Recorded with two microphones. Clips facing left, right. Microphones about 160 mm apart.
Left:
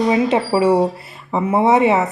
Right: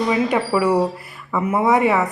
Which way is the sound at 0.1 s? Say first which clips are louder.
Left 3 dB; 25° left (ahead or behind).